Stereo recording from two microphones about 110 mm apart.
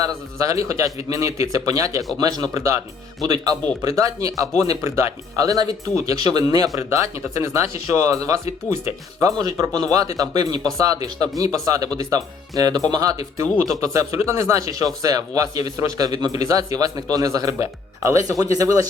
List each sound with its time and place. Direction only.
0.0 s a man's voice: 30° right (ahead or behind)